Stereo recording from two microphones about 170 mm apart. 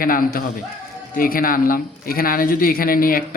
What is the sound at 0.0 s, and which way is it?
Speech, 55° left (ahead or behind).